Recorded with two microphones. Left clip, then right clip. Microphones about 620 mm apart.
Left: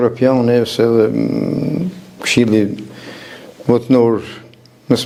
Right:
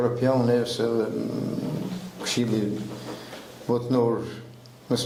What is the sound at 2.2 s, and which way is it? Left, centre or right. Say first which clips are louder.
Speech: left 13 dB; left.